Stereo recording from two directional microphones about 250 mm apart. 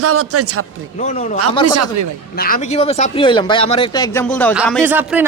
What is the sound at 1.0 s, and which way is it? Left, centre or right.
Speech, left.